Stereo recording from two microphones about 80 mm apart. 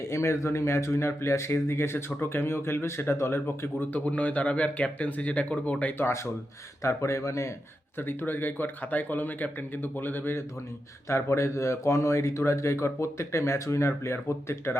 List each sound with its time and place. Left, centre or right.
0.1 s speech: left; by 5.9 s centre
6.0 s speech: left
7.9 s speech: left
11.1 s speech: left